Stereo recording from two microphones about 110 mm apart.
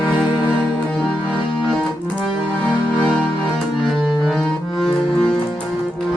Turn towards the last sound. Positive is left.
turn(degrees=5)  # may be behind; listen again after turning